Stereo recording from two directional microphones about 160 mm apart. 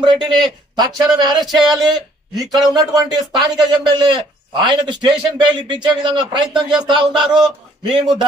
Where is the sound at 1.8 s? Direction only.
25° right (ahead or behind).